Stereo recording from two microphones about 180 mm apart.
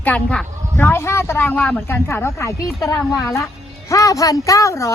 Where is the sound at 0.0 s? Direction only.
5° left (ahead or behind).